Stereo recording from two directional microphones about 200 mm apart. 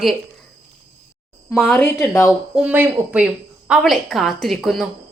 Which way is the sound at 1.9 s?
15° left (ahead or behind).